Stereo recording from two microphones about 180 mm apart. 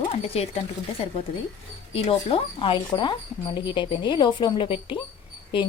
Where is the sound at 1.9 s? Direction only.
30° left (ahead or behind).